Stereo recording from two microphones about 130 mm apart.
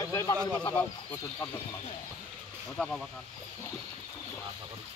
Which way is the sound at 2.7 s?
10° left (ahead or behind).